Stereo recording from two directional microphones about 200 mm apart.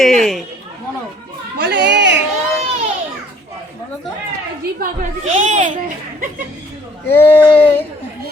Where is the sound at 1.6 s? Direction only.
55° right (ahead or behind).